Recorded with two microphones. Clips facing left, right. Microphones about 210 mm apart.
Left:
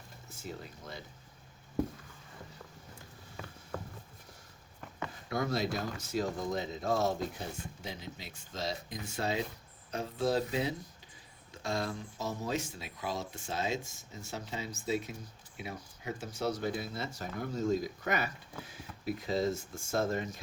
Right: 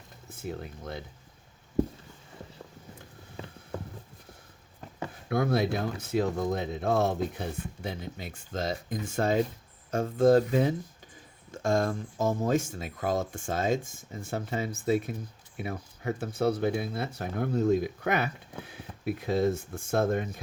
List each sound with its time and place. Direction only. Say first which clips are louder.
0.3 s speech: right 7 dB; 55° right (ahead or behind)
5.3 s speech: right 6 dB; 55° right (ahead or behind)